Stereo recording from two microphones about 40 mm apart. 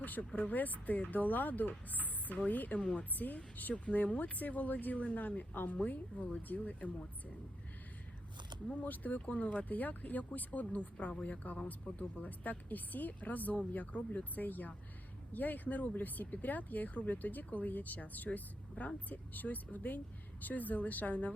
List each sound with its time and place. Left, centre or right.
0.0 s speech: left
2.7 s a woman's voice: left
8.8 s a woman's voice: left